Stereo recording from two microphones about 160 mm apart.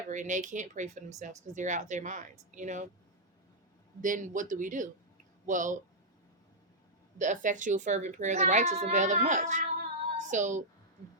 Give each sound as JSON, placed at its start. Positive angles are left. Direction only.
{"t": 0.1, "sound": "speech", "side_deg": -50}
{"t": 4.0, "sound": "speech", "side_deg": -55}
{"t": 7.2, "sound": "speech", "side_deg": -50}
{"t": 10.2, "sound": "child singing", "side_deg": -50}